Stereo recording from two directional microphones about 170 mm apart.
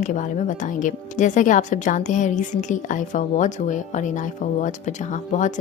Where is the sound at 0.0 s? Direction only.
45° left (ahead or behind).